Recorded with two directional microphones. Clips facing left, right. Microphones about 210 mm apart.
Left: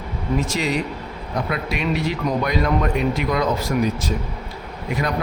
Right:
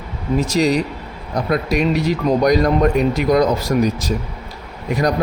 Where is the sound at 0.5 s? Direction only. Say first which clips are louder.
Right 6 dB; 40° right (ahead or behind).